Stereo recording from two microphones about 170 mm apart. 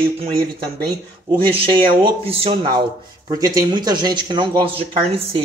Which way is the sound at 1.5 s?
30° right (ahead or behind).